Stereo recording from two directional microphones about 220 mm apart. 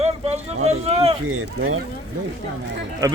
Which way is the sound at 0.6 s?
30° right (ahead or behind).